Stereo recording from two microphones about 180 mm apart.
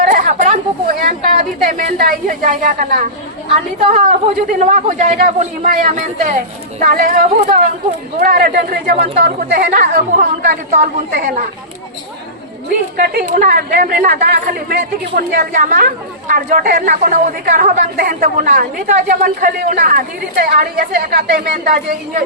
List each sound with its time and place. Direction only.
0.1 s chatter: 45° right (ahead or behind)
4.6 s speech: 45° right (ahead or behind); by 10.0 s 60° right (ahead or behind)
10.2 s speech: 45° right (ahead or behind)
13.0 s speech: 50° right (ahead or behind)